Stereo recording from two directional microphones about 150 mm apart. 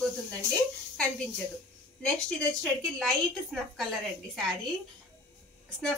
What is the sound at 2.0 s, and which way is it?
Speech, 5° left (ahead or behind).